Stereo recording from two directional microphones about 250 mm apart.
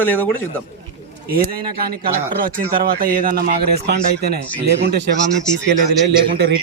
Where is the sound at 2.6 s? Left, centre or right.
Right.